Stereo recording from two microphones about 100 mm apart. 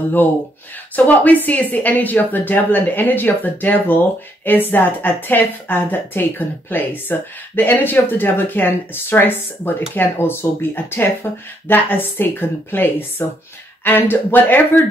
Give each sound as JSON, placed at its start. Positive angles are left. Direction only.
{"t": 0.9, "sound": "a woman's voice", "side_deg": 15}